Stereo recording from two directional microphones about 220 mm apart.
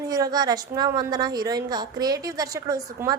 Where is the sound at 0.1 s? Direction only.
15° right (ahead or behind).